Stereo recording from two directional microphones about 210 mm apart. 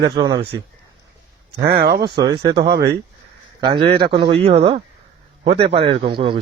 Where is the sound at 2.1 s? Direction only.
20° right (ahead or behind).